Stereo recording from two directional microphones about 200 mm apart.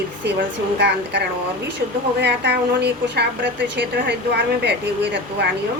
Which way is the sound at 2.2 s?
55° right (ahead or behind).